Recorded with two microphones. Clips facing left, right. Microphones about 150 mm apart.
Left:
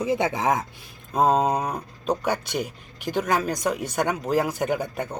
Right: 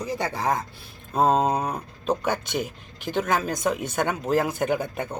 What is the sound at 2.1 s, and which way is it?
Speech, 10° left (ahead or behind).